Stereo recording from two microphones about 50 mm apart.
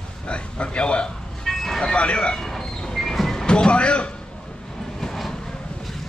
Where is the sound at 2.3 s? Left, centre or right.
Centre.